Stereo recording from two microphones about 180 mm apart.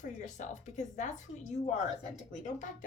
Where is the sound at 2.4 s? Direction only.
45° left (ahead or behind).